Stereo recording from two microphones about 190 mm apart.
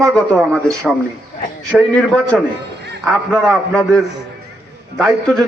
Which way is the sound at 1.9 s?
5° left (ahead or behind).